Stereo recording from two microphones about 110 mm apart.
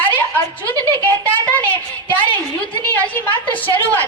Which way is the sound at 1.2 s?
15° left (ahead or behind).